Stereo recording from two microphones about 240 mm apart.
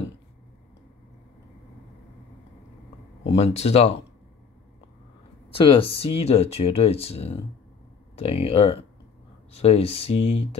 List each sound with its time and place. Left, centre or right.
3.3 s speech: left
5.5 s speech: left